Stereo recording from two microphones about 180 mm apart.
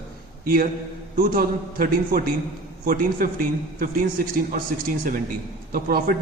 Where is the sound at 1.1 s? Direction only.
50° right (ahead or behind).